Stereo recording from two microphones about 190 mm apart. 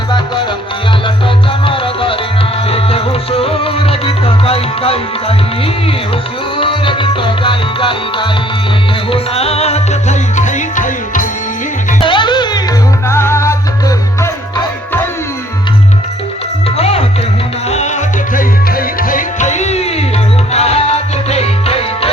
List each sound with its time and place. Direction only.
1.6 s music: 30° left (ahead or behind)
6.6 s music: 25° left (ahead or behind); by 11.3 s 45° left (ahead or behind)
12.0 s music: 25° left (ahead or behind)
16.7 s music: 30° left (ahead or behind)
18.3 s music: 50° left (ahead or behind); by 22.1 s 30° left (ahead or behind)